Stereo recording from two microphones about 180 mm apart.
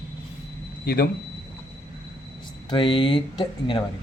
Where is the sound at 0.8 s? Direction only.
55° left (ahead or behind).